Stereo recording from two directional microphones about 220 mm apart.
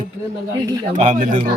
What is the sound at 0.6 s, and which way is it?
Speech, 15° right (ahead or behind).